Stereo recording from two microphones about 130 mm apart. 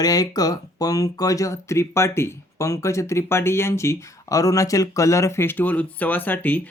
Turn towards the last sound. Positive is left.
turn(degrees=10)  # may be behind; listen again after turning